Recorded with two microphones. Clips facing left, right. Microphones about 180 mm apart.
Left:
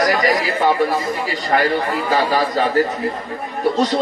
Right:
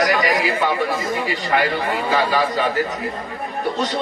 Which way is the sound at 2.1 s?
40° left (ahead or behind).